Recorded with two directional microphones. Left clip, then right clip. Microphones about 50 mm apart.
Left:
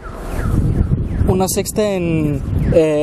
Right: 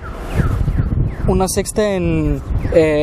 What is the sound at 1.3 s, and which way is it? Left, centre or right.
Speech, centre.